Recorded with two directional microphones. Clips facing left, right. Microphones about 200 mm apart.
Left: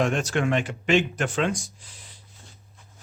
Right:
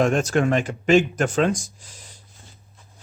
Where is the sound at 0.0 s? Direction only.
45° right (ahead or behind).